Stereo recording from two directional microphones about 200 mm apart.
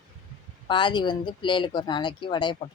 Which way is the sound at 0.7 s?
25° left (ahead or behind).